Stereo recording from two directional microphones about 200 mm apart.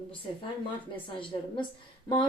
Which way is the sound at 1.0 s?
25° left (ahead or behind).